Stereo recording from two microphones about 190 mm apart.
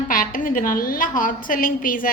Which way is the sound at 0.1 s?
45° left (ahead or behind).